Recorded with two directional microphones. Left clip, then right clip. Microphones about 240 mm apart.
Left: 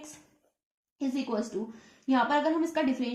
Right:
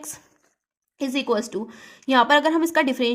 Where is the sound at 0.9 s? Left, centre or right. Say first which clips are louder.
Right 9 dB; right.